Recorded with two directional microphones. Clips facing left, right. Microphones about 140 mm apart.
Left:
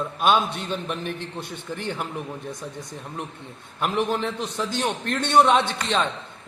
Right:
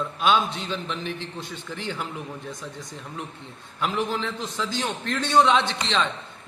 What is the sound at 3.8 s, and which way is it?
A man's voice, 55° left (ahead or behind).